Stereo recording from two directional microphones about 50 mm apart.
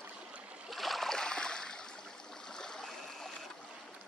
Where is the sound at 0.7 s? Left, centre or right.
Centre.